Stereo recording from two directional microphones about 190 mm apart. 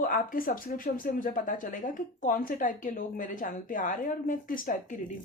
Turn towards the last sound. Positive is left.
turn(degrees=45)  # may be behind; listen again after turning